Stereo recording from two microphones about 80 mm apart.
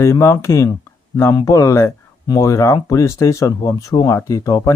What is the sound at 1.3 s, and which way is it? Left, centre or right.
Speech, left.